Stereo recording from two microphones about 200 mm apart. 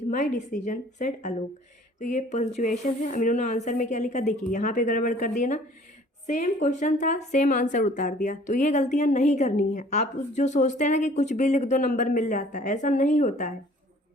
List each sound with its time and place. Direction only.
0.1 s a woman's voice: 40° left (ahead or behind)